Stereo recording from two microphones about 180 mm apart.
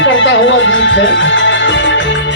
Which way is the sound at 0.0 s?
90° left.